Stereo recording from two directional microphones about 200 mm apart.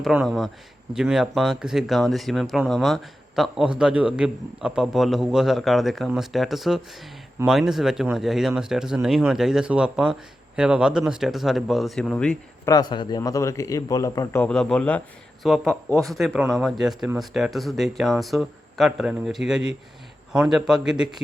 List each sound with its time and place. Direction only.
0.0 s speech: centre (ahead or behind)
12.7 s a man's voice: 20° left (ahead or behind); by 21.2 s 5° right (ahead or behind)